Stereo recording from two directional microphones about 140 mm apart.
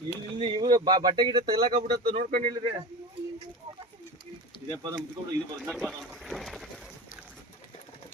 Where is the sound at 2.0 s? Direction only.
85° right.